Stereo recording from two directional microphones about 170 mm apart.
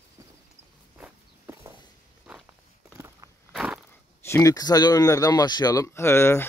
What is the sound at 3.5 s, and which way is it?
Biting, 5° right (ahead or behind).